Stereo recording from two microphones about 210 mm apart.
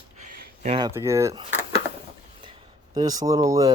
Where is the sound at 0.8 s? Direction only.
15° right (ahead or behind).